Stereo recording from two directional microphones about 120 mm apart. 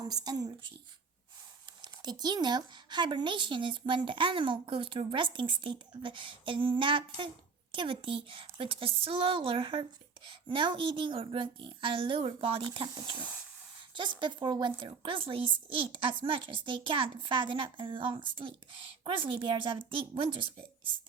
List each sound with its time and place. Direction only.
0.0 s a woman's voice: 35° right (ahead or behind)
1.8 s a woman's voice: 35° right (ahead or behind)